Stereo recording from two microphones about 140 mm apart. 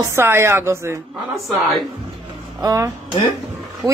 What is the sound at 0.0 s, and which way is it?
Speech, 20° right (ahead or behind).